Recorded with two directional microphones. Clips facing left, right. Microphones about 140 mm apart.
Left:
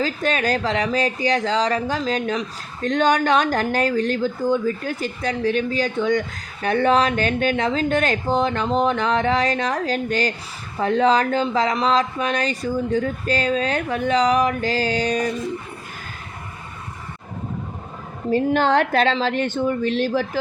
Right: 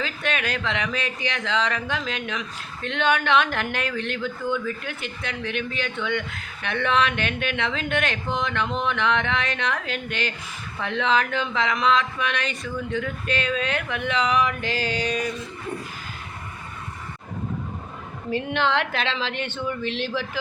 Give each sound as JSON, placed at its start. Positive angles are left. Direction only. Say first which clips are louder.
{"t": 0.0, "sound": "speech", "louder": "left 6 dB", "side_deg": 35}
{"t": 18.3, "sound": "speech", "louder": "left 6 dB", "side_deg": 40}